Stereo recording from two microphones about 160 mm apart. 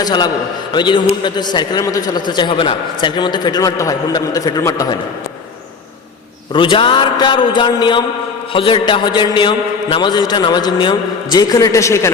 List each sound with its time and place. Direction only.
0.0 s a man's voice: 25° left (ahead or behind)
6.5 s a man's voice: 30° left (ahead or behind)